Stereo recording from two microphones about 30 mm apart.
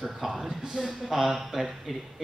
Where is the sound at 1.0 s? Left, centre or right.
Centre.